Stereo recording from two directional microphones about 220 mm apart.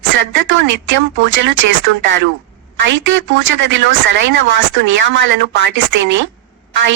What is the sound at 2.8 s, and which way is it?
Speech, 55° right (ahead or behind).